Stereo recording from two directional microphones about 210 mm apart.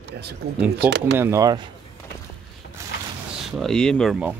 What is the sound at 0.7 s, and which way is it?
Speech, 55° right (ahead or behind).